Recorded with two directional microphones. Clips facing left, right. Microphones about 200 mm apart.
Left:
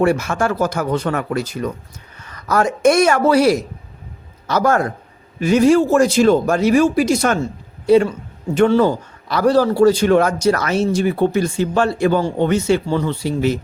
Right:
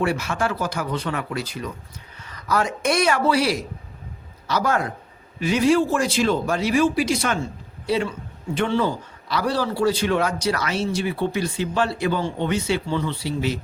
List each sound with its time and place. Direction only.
0.0 s a man's voice: 45° left (ahead or behind)